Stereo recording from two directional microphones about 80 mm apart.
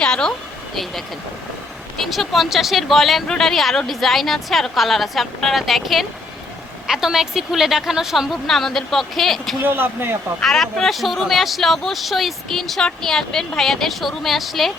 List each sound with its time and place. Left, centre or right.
0.0 s speech: centre
2.0 s speech: centre
9.6 s speech: right
10.4 s speech: centre